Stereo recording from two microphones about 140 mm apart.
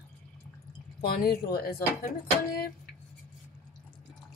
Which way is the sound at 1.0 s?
90° left.